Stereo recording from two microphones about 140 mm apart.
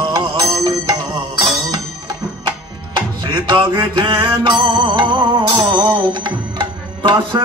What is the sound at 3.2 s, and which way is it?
Music, 35° right (ahead or behind).